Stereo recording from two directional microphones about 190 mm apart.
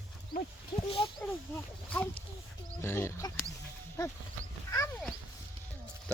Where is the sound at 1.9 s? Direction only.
5° left (ahead or behind).